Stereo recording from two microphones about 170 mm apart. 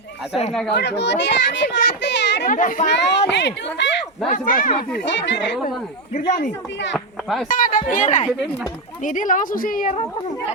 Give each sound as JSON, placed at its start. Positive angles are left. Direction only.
{"t": 0.7, "sound": "a child's voice", "side_deg": 85}
{"t": 2.5, "sound": "a woman's voice", "side_deg": 50}
{"t": 2.9, "sound": "a child's voice", "side_deg": 90}
{"t": 4.3, "sound": "a woman's voice", "side_deg": 50}
{"t": 5.0, "sound": "a child's voice", "side_deg": 90}
{"t": 6.1, "sound": "a woman's voice", "side_deg": 50}
{"t": 6.9, "sound": "speech", "side_deg": 0}
{"t": 7.4, "sound": "a woman's voice", "side_deg": 55}